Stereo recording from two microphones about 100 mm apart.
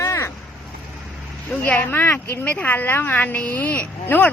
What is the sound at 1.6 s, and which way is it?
A woman's voice, 15° left (ahead or behind).